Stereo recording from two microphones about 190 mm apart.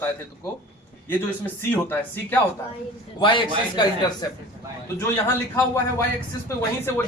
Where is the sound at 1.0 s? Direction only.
10° left (ahead or behind).